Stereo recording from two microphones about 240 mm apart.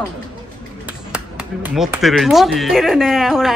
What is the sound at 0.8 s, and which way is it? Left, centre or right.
Speech, centre.